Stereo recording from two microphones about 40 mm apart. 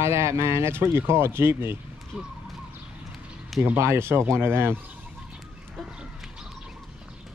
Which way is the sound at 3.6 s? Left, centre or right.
Right.